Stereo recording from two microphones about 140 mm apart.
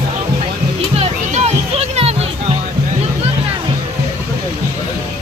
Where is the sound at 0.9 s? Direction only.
50° right (ahead or behind).